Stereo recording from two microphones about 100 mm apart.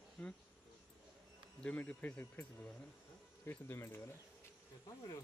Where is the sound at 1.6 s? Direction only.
15° left (ahead or behind); by 5.2 s 35° left (ahead or behind).